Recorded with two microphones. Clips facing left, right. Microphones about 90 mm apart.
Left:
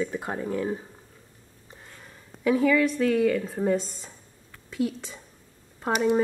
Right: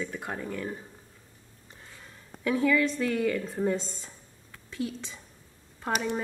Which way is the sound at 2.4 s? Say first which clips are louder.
Left 4 dB; 10° left (ahead or behind).